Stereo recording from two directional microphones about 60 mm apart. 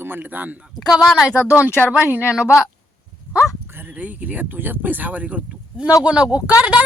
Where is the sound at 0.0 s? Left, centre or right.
Right.